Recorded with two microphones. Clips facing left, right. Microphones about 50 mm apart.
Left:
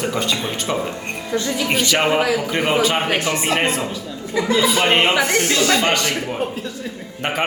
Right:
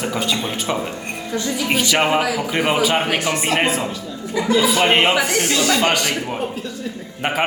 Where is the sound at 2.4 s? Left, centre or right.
Centre.